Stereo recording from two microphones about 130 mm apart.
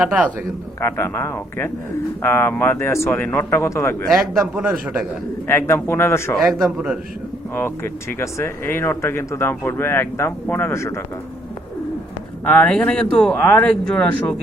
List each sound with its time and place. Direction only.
0.0 s a man's voice: 10° right (ahead or behind)
0.8 s speech: 20° left (ahead or behind)
4.1 s a man's voice: 10° right (ahead or behind)
5.5 s speech: 20° left (ahead or behind)
6.4 s a man's voice: 5° right (ahead or behind)
8.2 s speech: 20° left (ahead or behind)
12.5 s speech: 10° left (ahead or behind)